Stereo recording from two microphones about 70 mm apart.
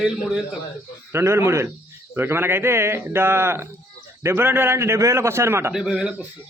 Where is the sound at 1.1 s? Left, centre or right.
Right.